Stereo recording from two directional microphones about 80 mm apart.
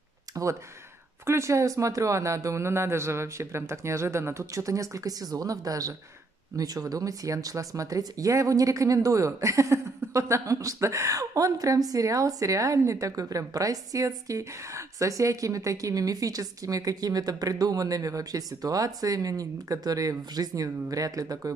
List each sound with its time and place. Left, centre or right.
0.3 s speech: right